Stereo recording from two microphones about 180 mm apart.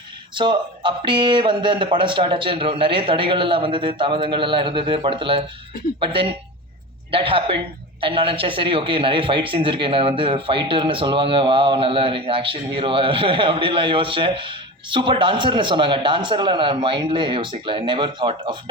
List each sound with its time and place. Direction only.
0.3 s a man's voice: 25° right (ahead or behind)